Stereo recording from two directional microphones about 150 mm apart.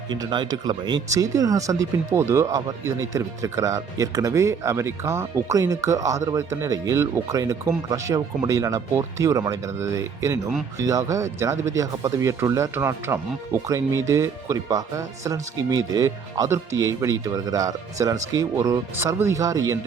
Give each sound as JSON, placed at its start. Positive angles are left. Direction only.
{"t": 0.1, "sound": "speech", "side_deg": -30}